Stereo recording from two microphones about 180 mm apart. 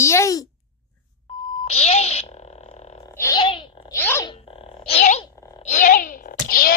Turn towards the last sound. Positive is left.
turn(degrees=55)  # may be behind; listen again after turning